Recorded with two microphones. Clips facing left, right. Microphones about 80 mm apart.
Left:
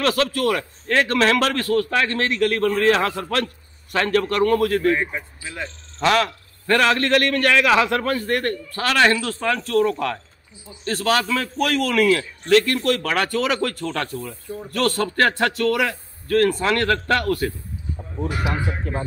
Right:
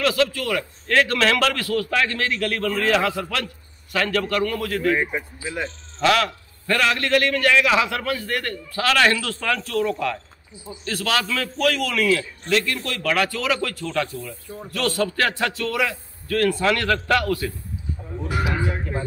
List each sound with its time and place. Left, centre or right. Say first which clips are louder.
0.0 s speech: left 1 dB; left
0.8 s a man's voice: left 1 dB; left
5.1 s speech: right 4 dB; centre
5.9 s a man's voice: left 1 dB; left
10.9 s a man's voice: left 3 dB; left
11.8 s speech: left 3 dB; left
13.0 s speech: left 1 dB; left
16.3 s a man's voice: left 2 dB; left
18.9 s speech: left 1 dB; left